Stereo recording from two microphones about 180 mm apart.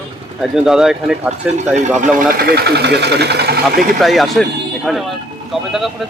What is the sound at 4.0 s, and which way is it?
A man's voice, centre (ahead or behind).